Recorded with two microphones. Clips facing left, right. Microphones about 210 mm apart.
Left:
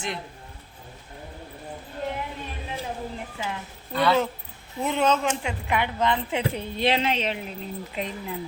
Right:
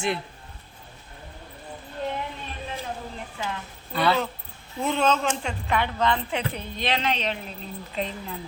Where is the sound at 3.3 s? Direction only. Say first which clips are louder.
Right 3 dB; 15° left (ahead or behind).